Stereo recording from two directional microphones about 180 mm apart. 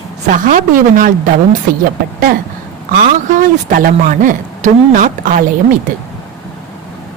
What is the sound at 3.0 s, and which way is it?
Speech, 45° right (ahead or behind).